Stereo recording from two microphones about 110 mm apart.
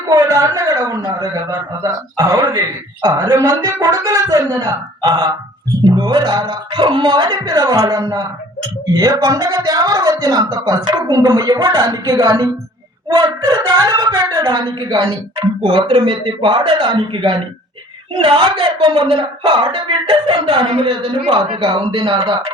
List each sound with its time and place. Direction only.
0.1 s speech: 30° right (ahead or behind)
15.4 s speech: 55° right (ahead or behind)